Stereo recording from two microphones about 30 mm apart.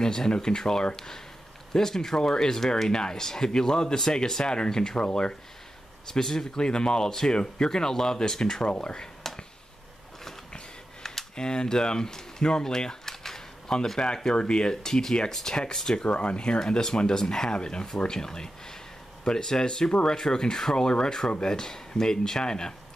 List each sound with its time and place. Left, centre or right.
0.0 s speech: left
6.1 s speech: centre
8.6 s speech: left
9.2 s a sound: centre
10.5 s a sound: centre
13.9 s speech: left
16.0 s speech: left
16.5 s speech: left